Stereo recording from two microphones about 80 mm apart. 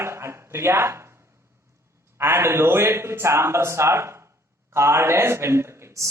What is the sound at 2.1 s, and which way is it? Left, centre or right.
Speech, right.